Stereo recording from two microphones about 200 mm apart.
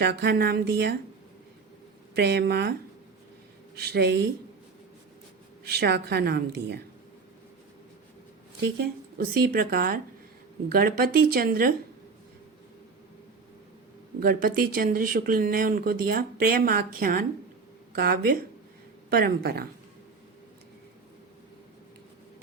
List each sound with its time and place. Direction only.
0.0 s a woman's voice: 55° right (ahead or behind)
2.1 s a woman's voice: 55° right (ahead or behind)
3.8 s a woman's voice: 55° right (ahead or behind)
5.7 s a woman's voice: 55° right (ahead or behind)
8.6 s speech: 50° right (ahead or behind)
14.2 s speech: 45° right (ahead or behind)